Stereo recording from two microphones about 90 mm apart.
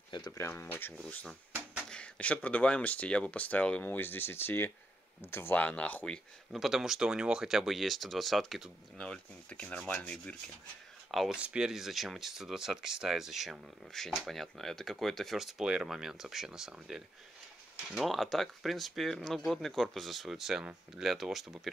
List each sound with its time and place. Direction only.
0.5 s speech: 25° left (ahead or behind)
0.9 s speech: 10° left (ahead or behind)
6.5 s speech: 5° right (ahead or behind)
8.9 s speech: 5° left (ahead or behind)
11.1 s speech: centre (ahead or behind)
11.3 s speech: 10° right (ahead or behind)